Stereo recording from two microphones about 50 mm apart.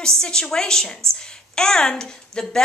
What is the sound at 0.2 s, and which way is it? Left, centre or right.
A woman's voice, centre.